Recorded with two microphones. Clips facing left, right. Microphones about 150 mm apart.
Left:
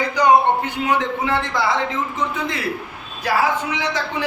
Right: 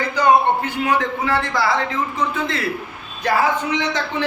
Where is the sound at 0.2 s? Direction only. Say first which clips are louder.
Even; 20° left (ahead or behind).